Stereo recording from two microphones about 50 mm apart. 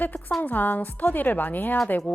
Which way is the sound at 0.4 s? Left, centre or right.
Left.